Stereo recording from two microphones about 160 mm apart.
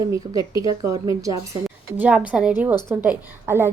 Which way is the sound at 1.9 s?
10° right (ahead or behind).